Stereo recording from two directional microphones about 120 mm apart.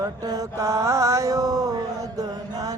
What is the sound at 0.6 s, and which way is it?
Mantra, 25° right (ahead or behind).